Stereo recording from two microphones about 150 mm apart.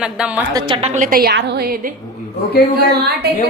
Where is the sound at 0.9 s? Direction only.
65° right (ahead or behind); by 1.8 s 90° right.